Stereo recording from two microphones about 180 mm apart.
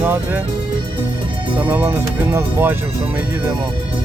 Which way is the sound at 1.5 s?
10° right (ahead or behind).